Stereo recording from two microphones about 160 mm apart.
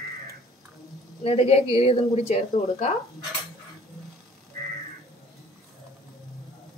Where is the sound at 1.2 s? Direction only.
40° left (ahead or behind).